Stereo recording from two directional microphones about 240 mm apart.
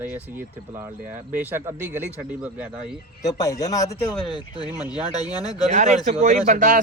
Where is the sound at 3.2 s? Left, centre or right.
Centre.